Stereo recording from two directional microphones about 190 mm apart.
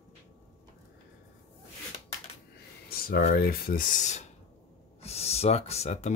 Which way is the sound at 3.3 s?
55° left (ahead or behind).